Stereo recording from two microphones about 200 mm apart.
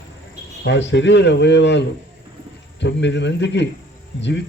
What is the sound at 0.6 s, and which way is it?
A man's voice, 65° left (ahead or behind).